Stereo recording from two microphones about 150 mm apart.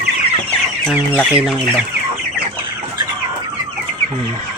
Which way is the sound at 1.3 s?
5° right (ahead or behind).